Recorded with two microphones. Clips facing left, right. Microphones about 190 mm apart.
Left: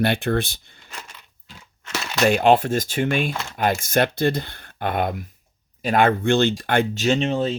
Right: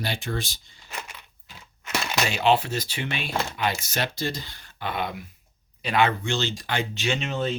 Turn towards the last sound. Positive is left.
turn(degrees=35)  # may be behind; listen again after turning